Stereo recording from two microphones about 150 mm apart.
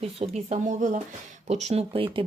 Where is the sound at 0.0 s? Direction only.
40° right (ahead or behind).